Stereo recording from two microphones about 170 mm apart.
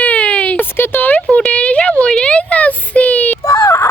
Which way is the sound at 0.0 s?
10° left (ahead or behind).